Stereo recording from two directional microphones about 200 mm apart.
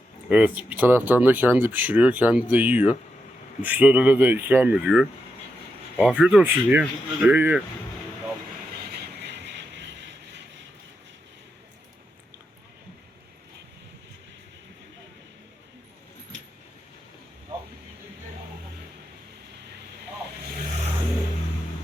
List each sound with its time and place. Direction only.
0.3 s speech: 5° right (ahead or behind)
8.9 s mechanisms: 55° right (ahead or behind)